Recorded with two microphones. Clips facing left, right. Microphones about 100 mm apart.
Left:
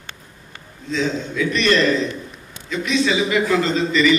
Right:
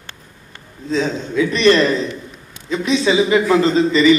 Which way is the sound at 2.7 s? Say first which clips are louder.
Right 4 dB; 35° right (ahead or behind).